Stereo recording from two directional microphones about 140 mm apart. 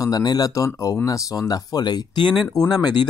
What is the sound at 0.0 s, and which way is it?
Speech, 25° left (ahead or behind).